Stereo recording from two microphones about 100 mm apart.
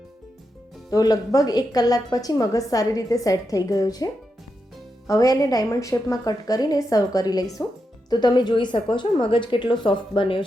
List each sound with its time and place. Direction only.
0.9 s a woman's voice: 40° left (ahead or behind); by 10.4 s 60° left (ahead or behind)